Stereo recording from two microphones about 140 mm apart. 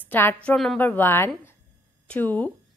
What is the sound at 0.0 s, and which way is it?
A woman's voice, 15° left (ahead or behind).